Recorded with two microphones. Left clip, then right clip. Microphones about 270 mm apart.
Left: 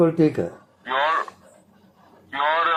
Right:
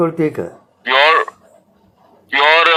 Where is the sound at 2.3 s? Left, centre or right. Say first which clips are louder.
Right 10 dB; right.